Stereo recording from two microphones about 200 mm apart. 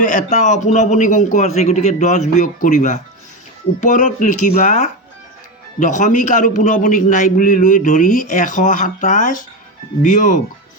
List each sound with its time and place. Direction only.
0.0 s a man's voice: 40° left (ahead or behind)